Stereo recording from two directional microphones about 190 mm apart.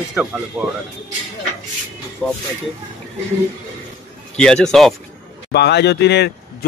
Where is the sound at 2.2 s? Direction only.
5° left (ahead or behind).